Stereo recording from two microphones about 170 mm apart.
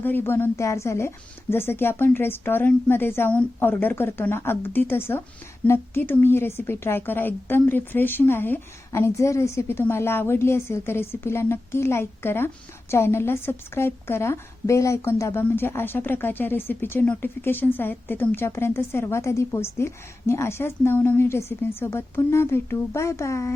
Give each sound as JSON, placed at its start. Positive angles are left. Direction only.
{"t": 0.0, "sound": "a woman's voice", "side_deg": 10}